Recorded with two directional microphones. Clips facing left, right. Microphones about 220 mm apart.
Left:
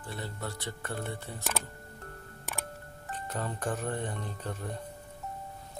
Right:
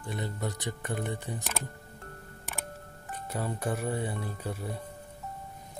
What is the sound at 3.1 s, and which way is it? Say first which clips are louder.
Speech: right 2 dB; 10° right (ahead or behind).